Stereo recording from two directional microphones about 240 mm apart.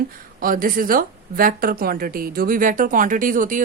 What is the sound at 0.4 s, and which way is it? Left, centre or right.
A woman's voice, right.